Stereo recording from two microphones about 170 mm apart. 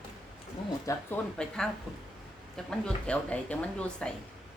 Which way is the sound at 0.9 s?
20° left (ahead or behind).